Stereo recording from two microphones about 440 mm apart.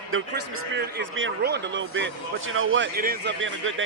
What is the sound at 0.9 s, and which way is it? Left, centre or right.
A man's voice, right.